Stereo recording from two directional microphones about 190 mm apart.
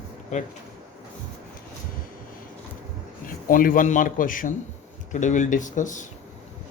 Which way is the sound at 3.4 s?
45° left (ahead or behind).